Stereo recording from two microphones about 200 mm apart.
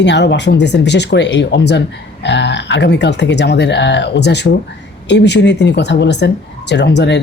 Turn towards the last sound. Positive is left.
turn(degrees=60)  # may be behind; listen again after turning